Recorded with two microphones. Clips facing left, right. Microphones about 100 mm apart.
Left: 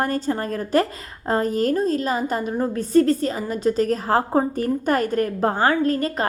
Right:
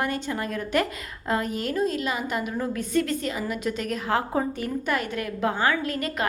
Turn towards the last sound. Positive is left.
turn(degrees=35)  # may be behind; listen again after turning